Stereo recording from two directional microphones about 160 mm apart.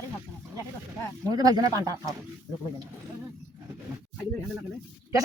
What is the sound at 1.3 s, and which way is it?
Speech, 25° right (ahead or behind).